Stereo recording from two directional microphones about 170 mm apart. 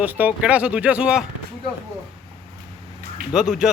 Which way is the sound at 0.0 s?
10° right (ahead or behind).